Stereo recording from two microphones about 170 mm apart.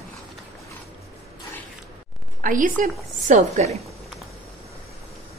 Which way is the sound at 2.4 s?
50° right (ahead or behind).